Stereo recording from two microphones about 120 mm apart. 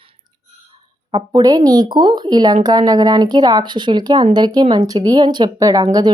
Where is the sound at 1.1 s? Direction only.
35° right (ahead or behind).